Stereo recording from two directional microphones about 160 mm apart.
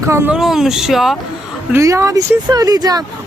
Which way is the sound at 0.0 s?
15° right (ahead or behind).